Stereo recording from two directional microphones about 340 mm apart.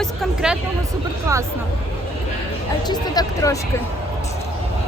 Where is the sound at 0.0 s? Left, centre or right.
Centre.